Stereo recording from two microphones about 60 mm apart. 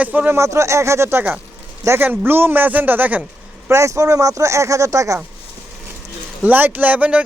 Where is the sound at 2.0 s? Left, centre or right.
Right.